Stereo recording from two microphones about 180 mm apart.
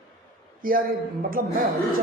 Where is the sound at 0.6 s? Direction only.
50° right (ahead or behind).